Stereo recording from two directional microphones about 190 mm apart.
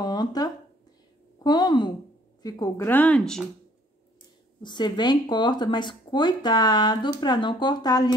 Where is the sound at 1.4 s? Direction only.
20° left (ahead or behind); by 3.4 s 5° left (ahead or behind).